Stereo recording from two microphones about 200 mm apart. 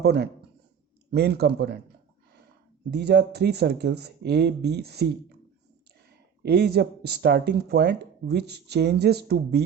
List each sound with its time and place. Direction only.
0.0 s speech: 55° right (ahead or behind)
2.9 s speech: 55° right (ahead or behind)